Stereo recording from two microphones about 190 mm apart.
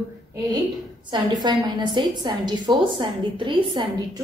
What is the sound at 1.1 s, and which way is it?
A woman's voice, 20° right (ahead or behind).